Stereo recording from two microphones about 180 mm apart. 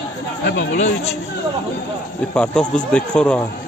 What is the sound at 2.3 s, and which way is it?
Speech, 5° left (ahead or behind).